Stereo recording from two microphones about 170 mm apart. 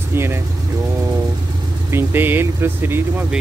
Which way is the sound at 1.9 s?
10° right (ahead or behind).